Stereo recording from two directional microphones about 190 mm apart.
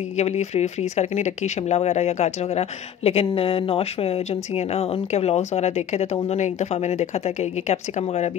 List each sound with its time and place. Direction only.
0.2 s speech: 35° left (ahead or behind)